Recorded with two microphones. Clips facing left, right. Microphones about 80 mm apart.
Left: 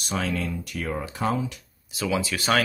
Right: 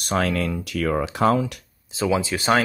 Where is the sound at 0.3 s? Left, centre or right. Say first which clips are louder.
Right 4 dB; right.